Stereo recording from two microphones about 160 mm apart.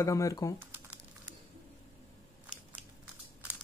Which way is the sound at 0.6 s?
10° right (ahead or behind).